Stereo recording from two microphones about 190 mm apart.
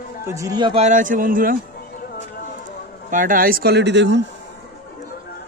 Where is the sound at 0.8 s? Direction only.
40° right (ahead or behind).